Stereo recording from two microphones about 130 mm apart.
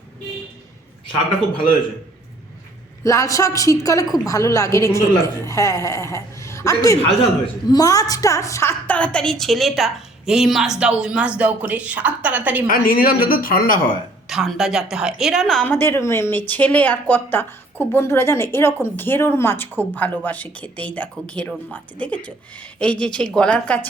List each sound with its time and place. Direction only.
3.0 s a woman's voice: 25° left (ahead or behind)
8.9 s a woman's voice: 10° left (ahead or behind); by 12.6 s 10° right (ahead or behind)
12.6 s speech: 90° left
14.3 s a woman's voice: centre (ahead or behind)
15.7 s a woman's voice: 15° left (ahead or behind)